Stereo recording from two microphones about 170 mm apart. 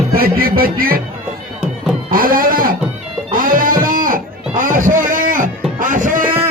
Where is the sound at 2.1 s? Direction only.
55° right (ahead or behind).